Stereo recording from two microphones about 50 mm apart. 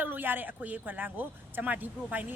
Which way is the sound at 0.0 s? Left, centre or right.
Right.